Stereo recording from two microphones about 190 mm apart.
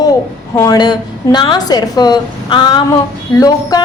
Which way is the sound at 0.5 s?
20° left (ahead or behind).